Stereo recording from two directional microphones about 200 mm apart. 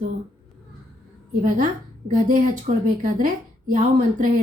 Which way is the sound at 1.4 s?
40° right (ahead or behind).